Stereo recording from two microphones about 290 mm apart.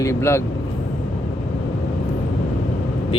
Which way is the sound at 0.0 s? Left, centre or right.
Centre.